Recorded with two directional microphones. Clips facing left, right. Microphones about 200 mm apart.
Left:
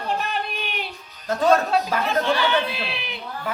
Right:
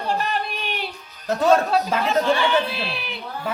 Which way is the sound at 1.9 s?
25° right (ahead or behind).